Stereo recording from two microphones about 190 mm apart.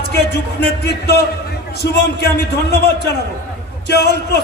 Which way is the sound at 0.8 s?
55° left (ahead or behind).